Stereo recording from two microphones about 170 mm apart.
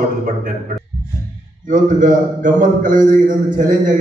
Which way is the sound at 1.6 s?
50° right (ahead or behind).